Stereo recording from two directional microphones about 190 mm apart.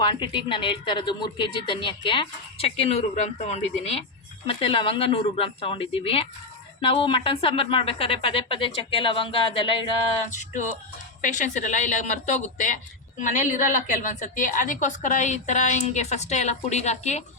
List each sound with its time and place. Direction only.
0.0 s a woman's voice: 25° left (ahead or behind)
10.2 s a woman's voice: 40° left (ahead or behind)